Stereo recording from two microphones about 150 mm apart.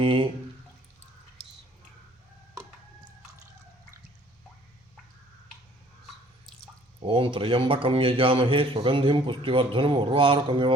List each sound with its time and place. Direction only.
0.0 s drip: 35° right (ahead or behind)
7.0 s a man's voice: 35° right (ahead or behind)